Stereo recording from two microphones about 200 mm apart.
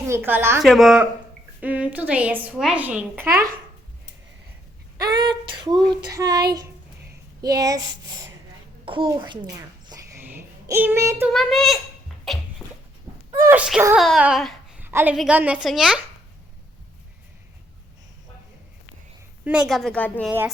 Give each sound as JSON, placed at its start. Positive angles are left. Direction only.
{"t": 0.1, "sound": "a woman's voice", "side_deg": -10}
{"t": 0.6, "sound": "a woman's voice", "side_deg": 0}
{"t": 4.9, "sound": "child singing", "side_deg": -20}
{"t": 7.4, "sound": "speech", "side_deg": -20}
{"t": 8.8, "sound": "a sound", "side_deg": -25}
{"t": 11.3, "sound": "a woman's voice", "side_deg": 0}
{"t": 12.2, "sound": "a sound", "side_deg": 0}
{"t": 13.3, "sound": "a woman's voice", "side_deg": -10}
{"t": 13.9, "sound": "babbling", "side_deg": 0}
{"t": 14.8, "sound": "a woman's voice", "side_deg": -10}
{"t": 19.5, "sound": "a woman's voice", "side_deg": -5}